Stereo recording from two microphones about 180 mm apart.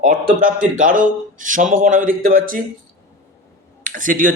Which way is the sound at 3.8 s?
50° right (ahead or behind).